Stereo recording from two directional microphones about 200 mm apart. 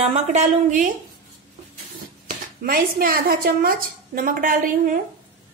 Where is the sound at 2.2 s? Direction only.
45° right (ahead or behind).